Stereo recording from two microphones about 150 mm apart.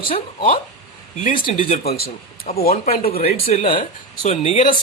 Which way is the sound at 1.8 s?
90° left.